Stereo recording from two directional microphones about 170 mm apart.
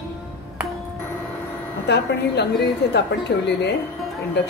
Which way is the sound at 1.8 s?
80° left.